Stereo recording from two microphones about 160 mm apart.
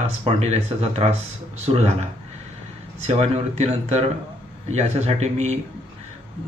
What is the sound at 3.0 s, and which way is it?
Speech, 40° right (ahead or behind).